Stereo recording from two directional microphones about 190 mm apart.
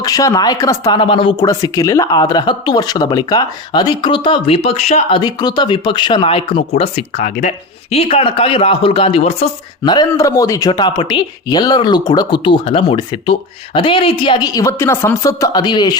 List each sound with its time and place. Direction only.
0.0 s speech: 20° left (ahead or behind); by 5.2 s 35° left (ahead or behind)
5.2 s speech: 20° left (ahead or behind)